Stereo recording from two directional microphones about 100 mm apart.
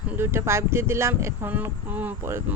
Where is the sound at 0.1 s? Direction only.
25° right (ahead or behind).